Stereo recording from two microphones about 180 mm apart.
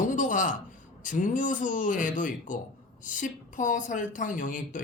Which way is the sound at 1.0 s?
45° left (ahead or behind).